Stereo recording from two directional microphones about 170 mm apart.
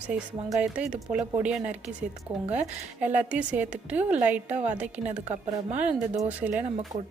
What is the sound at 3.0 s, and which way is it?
A woman's voice, 10° right (ahead or behind).